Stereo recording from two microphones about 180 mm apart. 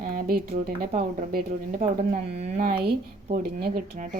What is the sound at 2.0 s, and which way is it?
Speech, 40° right (ahead or behind).